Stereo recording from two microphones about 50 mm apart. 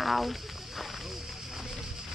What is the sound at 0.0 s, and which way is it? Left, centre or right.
Speech, centre.